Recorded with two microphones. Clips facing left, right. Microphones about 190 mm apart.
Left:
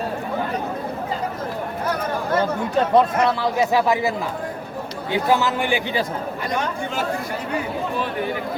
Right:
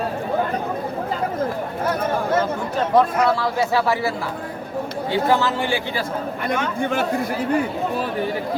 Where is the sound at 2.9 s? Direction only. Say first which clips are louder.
Right 2 dB; 20° left (ahead or behind).